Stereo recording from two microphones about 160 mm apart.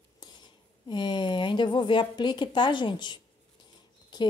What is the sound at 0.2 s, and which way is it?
A woman's voice, 30° left (ahead or behind).